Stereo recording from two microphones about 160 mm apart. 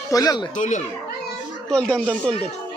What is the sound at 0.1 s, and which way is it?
Speech, 20° left (ahead or behind).